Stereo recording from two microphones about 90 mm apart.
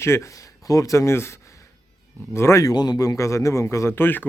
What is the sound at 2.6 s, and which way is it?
A man's voice, 50° left (ahead or behind).